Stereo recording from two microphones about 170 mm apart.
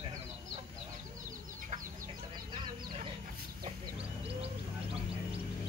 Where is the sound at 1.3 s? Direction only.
50° right (ahead or behind).